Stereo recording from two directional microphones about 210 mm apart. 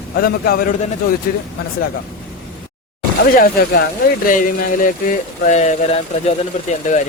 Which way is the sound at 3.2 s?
50° left (ahead or behind).